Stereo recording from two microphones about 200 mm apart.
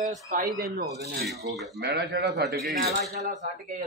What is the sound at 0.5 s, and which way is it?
A man's voice, 50° right (ahead or behind).